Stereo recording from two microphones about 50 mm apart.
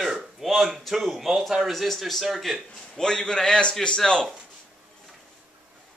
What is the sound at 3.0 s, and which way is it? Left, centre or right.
A man's voice, centre.